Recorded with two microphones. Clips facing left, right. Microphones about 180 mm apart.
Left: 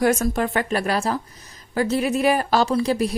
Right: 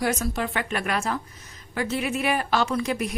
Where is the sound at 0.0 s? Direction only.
45° left (ahead or behind).